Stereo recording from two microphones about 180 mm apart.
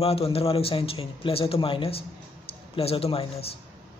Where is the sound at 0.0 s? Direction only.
35° left (ahead or behind).